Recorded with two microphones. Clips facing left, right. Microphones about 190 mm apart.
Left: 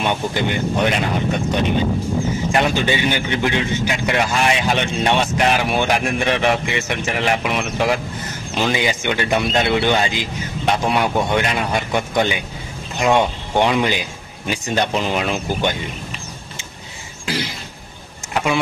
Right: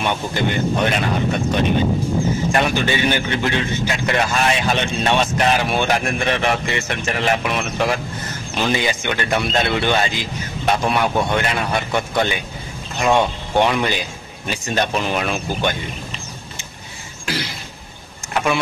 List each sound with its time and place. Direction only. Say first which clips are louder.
0.0 s a man's voice: left 1 dB; 15° left (ahead or behind)